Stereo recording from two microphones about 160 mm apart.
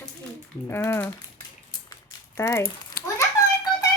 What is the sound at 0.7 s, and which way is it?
Speech, 15° left (ahead or behind).